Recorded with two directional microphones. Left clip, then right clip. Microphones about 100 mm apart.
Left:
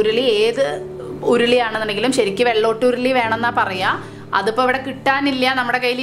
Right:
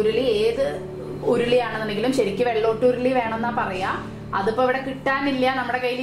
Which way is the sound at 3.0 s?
90° left.